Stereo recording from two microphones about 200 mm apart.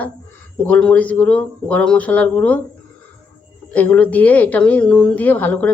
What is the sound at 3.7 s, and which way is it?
A woman's voice, 5° left (ahead or behind).